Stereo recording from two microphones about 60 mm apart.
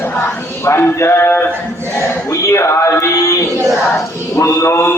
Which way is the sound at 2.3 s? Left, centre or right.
Left.